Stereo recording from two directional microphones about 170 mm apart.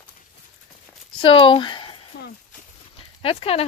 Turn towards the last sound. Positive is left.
turn(degrees=35)  # may be behind; listen again after turning